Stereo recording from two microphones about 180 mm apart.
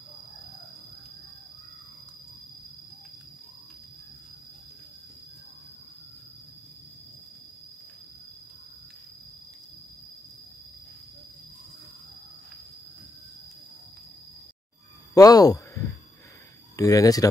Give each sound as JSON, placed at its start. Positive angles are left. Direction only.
{"t": 15.1, "sound": "speech", "side_deg": 20}